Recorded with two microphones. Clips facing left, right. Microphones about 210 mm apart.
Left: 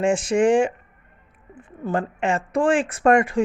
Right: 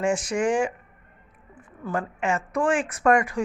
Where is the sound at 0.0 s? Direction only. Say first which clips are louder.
Left 5 dB; 25° left (ahead or behind).